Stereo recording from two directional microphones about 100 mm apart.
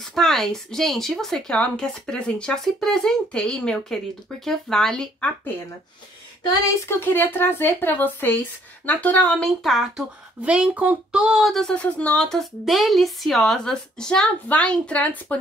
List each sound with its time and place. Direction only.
0.0 s speech: 5° left (ahead or behind)
6.9 s a woman's voice: 20° left (ahead or behind)
9.6 s speech: centre (ahead or behind)
10.4 s speech: 15° right (ahead or behind)
11.7 s a woman's voice: 15° left (ahead or behind)